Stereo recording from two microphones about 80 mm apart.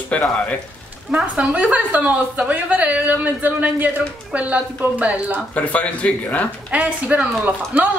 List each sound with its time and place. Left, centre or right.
0.1 s speech: centre
1.1 s a woman's voice: centre
5.5 s speech: centre
6.7 s a woman's voice: centre